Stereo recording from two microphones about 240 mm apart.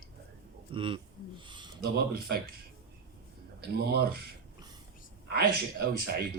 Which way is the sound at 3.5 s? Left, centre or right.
Right.